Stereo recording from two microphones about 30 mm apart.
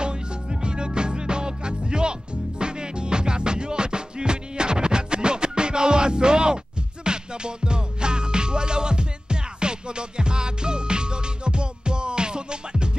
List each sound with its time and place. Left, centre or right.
0.0 s music: right